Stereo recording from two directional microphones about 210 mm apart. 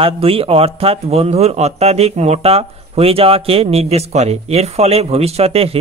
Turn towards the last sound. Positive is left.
turn(degrees=-30)  # may be behind; listen again after turning